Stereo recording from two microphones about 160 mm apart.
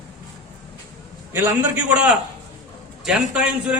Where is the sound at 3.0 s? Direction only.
5° right (ahead or behind).